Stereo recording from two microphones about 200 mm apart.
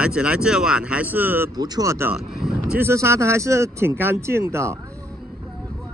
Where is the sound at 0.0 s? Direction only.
5° right (ahead or behind).